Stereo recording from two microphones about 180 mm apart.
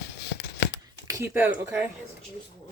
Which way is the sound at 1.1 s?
15° right (ahead or behind).